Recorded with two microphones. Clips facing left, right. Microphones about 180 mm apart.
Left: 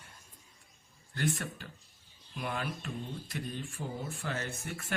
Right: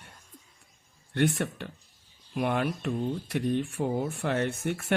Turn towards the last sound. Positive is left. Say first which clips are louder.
# right 10 dB
turn(degrees=-70)  # may be behind; listen again after turning